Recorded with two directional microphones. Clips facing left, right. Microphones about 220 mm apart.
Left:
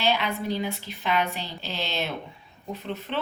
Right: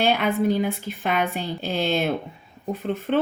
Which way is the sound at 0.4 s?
50° right (ahead or behind).